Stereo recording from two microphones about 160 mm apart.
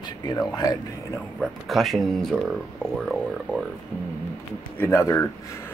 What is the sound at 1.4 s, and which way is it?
Speech, centre (ahead or behind).